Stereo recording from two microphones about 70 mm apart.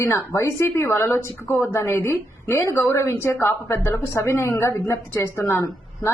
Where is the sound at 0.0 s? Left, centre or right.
Left.